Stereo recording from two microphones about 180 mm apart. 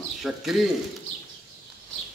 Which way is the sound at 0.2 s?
Centre (ahead or behind).